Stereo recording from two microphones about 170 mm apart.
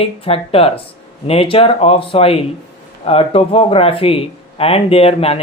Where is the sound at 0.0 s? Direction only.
35° left (ahead or behind).